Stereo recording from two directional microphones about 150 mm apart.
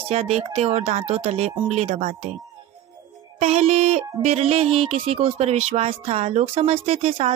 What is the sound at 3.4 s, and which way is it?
Music, 45° right (ahead or behind).